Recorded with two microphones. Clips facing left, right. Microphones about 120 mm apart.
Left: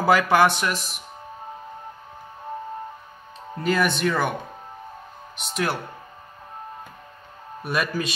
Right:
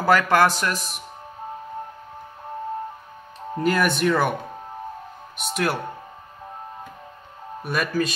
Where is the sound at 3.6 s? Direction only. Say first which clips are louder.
Right 1 dB; 5° right (ahead or behind).